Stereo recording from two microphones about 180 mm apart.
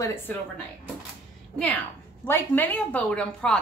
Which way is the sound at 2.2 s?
10° left (ahead or behind).